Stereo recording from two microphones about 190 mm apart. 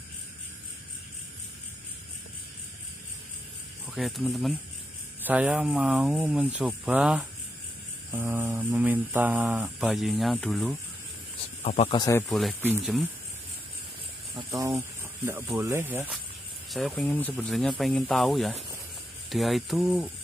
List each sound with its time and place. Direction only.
3.9 s speech: centre (ahead or behind)
11.6 s speech: 35° left (ahead or behind)
12.0 s speech: 15° left (ahead or behind)
12.3 s speech: centre (ahead or behind)
14.3 s speech: 25° right (ahead or behind)
14.8 s snake: 10° right (ahead or behind)
15.5 s speech: 15° right (ahead or behind)
16.7 s speech: centre (ahead or behind)